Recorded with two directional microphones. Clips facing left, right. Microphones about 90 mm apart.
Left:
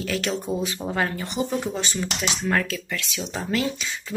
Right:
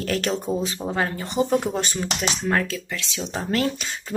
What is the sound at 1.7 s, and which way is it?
Speech, 40° right (ahead or behind).